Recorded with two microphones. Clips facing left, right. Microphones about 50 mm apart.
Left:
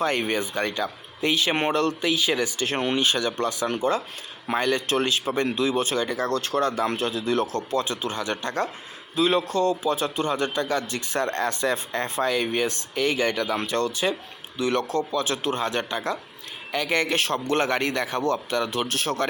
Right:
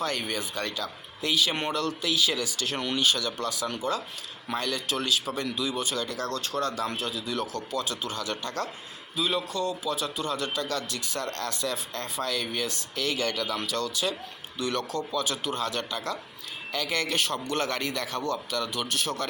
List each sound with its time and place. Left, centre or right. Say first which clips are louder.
0.0 s speech: left 6 dB; left
6.1 s a man's voice: left 6 dB; left
9.1 s a man's voice: left 7 dB; left